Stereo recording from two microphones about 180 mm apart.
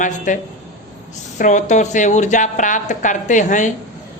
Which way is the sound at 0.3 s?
45° left (ahead or behind).